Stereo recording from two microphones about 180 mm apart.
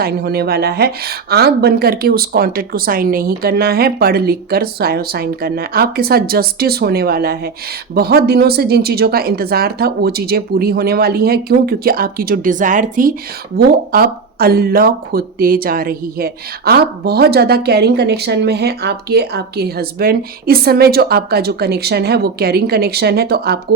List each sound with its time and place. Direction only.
0.0 s speech: 60° right (ahead or behind)
13.5 s speech: 60° right (ahead or behind)